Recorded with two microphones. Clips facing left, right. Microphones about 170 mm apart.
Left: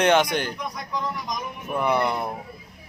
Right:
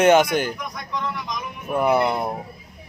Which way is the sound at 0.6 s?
35° left (ahead or behind).